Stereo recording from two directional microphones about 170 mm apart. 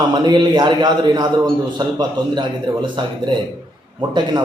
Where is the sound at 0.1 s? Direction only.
25° right (ahead or behind).